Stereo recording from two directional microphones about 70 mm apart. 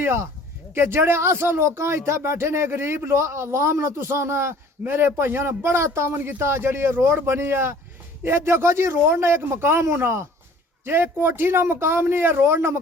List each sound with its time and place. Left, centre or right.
0.0 s speech: right